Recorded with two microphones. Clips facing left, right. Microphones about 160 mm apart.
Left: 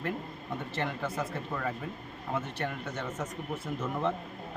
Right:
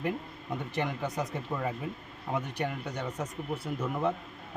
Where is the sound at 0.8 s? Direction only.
15° right (ahead or behind).